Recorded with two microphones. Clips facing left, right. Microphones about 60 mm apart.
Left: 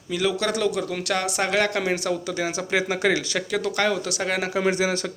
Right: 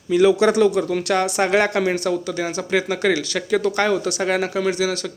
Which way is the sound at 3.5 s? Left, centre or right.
Centre.